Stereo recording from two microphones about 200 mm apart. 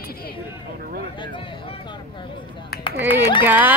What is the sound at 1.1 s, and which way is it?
Speech, 25° left (ahead or behind).